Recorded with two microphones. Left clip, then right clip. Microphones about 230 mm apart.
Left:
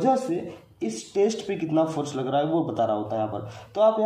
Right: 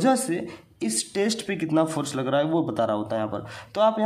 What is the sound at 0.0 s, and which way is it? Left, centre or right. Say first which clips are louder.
Speech: even; right.